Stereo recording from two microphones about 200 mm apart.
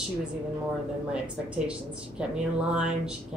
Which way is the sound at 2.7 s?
5° right (ahead or behind).